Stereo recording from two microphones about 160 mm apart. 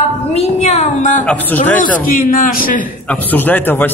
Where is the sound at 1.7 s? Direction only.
60° left (ahead or behind).